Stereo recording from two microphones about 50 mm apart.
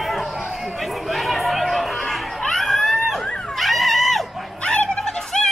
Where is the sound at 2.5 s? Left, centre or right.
Centre.